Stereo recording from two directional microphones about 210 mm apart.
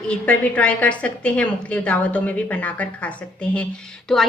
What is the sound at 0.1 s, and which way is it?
A woman's voice, 5° left (ahead or behind).